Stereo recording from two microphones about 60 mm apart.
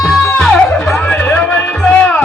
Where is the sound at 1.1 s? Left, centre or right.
Left.